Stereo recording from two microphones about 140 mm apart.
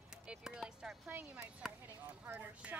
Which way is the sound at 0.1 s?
5° right (ahead or behind).